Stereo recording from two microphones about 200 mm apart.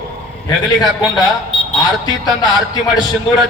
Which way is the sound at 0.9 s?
20° left (ahead or behind).